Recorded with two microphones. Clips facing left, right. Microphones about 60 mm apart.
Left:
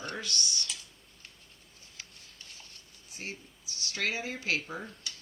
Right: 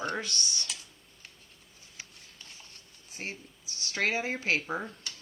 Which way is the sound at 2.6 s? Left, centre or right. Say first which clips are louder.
Even; right.